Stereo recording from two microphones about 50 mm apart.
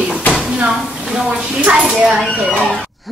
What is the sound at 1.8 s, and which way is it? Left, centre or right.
Speech, centre.